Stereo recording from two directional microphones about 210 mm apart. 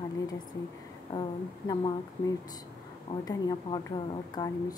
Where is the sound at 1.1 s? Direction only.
20° left (ahead or behind).